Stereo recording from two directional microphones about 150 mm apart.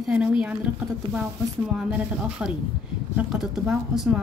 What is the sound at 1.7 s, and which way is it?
A woman's voice, 5° right (ahead or behind).